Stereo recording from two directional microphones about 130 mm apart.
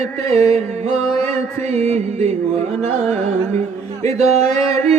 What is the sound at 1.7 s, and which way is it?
Music, 55° right (ahead or behind).